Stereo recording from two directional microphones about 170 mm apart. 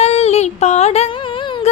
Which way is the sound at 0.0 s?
40° left (ahead or behind).